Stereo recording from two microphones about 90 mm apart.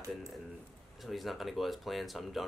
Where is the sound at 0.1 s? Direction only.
Centre (ahead or behind).